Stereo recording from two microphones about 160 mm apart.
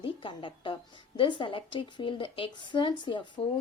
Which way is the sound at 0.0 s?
30° left (ahead or behind).